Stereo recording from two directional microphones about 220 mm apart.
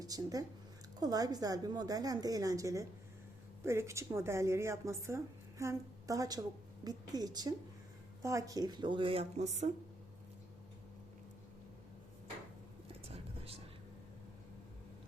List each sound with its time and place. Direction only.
0.0 s a woman's voice: 15° right (ahead or behind); by 9.7 s 30° right (ahead or behind)
12.9 s whispering: 25° right (ahead or behind)